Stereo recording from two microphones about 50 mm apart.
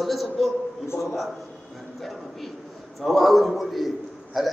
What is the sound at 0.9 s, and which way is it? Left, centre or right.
Speech, left.